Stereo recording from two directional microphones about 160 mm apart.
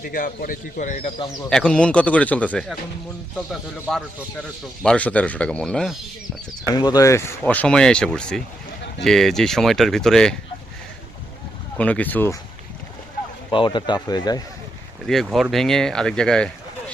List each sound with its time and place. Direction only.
0.0 s speech: 60° left (ahead or behind)
1.5 s speech: 5° left (ahead or behind)
4.8 s speech: 5° left (ahead or behind)
6.7 s speech: 25° left (ahead or behind); by 10.3 s 5° left (ahead or behind)
11.8 s speech: 10° left (ahead or behind)
13.5 s speech: 30° left (ahead or behind)
15.0 s speech: centre (ahead or behind)